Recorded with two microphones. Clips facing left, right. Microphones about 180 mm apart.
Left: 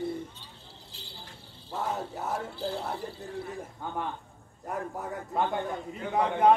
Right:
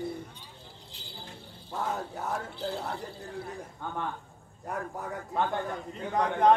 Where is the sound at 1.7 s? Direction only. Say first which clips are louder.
Left 1 dB; centre (ahead or behind).